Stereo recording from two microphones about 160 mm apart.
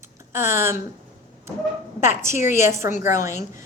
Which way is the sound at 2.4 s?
15° right (ahead or behind).